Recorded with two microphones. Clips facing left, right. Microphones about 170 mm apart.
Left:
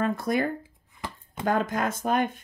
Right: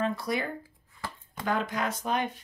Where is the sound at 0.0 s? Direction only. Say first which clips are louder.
Left 4 dB; 50° left (ahead or behind).